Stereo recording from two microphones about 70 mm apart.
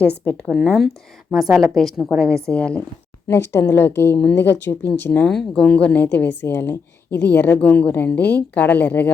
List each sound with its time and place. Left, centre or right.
0.0 s a woman's voice: centre
0.4 s speech: centre
2.5 s speech: centre
3.2 s speech: left
5.2 s a woman's voice: centre; by 9.1 s left